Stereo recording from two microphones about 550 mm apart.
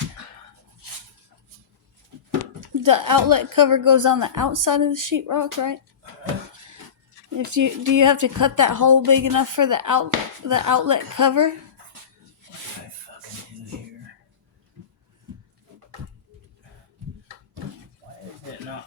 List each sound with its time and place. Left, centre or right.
2.6 s speech: right
7.3 s speech: right